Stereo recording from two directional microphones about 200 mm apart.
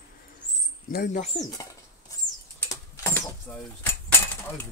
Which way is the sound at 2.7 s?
15° left (ahead or behind).